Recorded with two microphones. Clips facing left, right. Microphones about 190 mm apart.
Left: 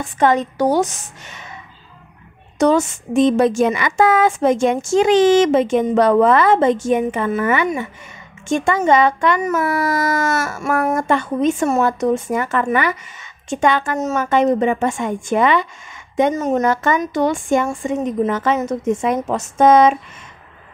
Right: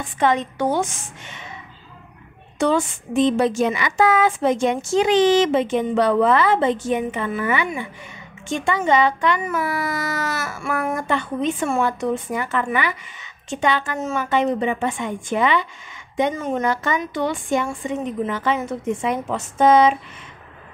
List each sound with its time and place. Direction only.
0.0 s speech: 45° left (ahead or behind)
2.6 s speech: 45° left (ahead or behind)